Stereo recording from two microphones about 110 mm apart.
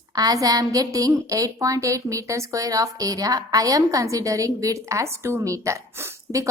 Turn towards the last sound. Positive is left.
turn(degrees=-30)  # may be behind; listen again after turning